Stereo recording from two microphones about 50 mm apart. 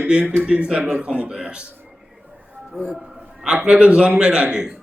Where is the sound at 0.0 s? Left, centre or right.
Right.